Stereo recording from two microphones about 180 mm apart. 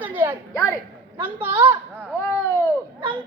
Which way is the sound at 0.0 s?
10° right (ahead or behind).